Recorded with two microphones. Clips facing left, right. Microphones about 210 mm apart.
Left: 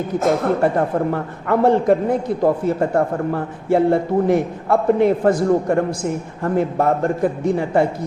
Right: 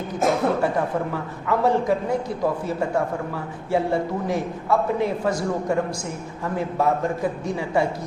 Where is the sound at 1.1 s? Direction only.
55° left (ahead or behind).